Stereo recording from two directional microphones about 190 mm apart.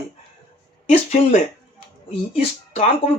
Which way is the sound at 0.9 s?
40° left (ahead or behind).